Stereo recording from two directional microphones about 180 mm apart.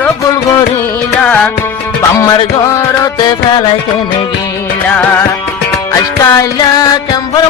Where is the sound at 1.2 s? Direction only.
5° left (ahead or behind).